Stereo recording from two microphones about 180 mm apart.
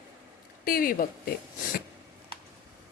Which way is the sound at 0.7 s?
55° left (ahead or behind).